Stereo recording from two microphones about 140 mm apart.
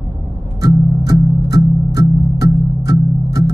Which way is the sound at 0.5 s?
25° right (ahead or behind).